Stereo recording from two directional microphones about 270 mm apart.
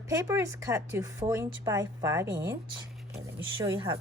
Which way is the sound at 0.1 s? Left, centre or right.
Centre.